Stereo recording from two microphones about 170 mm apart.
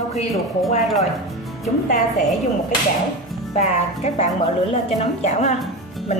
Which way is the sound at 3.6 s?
40° left (ahead or behind).